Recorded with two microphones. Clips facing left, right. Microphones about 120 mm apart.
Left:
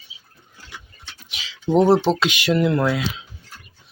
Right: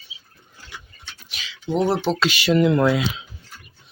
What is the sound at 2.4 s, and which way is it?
Speech, 5° left (ahead or behind).